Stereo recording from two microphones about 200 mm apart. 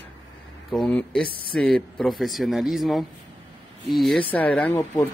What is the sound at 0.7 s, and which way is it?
Speech, 5° left (ahead or behind).